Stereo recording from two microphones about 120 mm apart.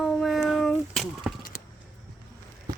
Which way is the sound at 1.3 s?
10° right (ahead or behind).